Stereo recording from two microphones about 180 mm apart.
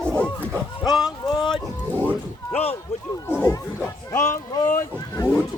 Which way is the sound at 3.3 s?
15° left (ahead or behind).